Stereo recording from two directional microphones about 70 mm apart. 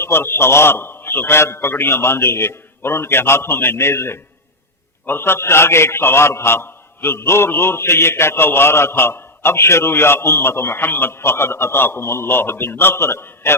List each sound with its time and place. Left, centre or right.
0.0 s a man's voice: left